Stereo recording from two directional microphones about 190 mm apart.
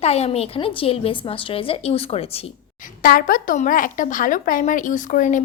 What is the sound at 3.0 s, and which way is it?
A woman's voice, 50° left (ahead or behind).